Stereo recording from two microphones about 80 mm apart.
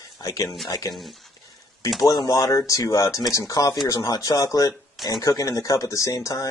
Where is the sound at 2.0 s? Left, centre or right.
Left.